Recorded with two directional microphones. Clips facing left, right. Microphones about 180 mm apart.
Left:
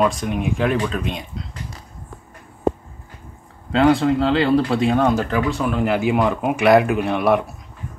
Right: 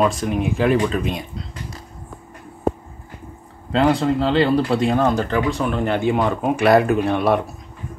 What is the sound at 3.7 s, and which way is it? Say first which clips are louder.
Speech: left 2 dB; centre (ahead or behind).